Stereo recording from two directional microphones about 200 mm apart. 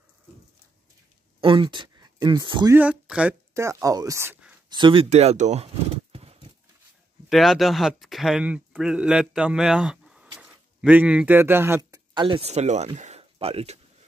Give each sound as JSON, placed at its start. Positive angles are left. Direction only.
{"t": 1.4, "sound": "speech", "side_deg": -25}
{"t": 2.7, "sound": "speech", "side_deg": -5}
{"t": 4.6, "sound": "speech", "side_deg": -25}
{"t": 6.1, "sound": "horse", "side_deg": -30}
{"t": 7.2, "sound": "speech", "side_deg": 0}
{"t": 12.1, "sound": "speech", "side_deg": -25}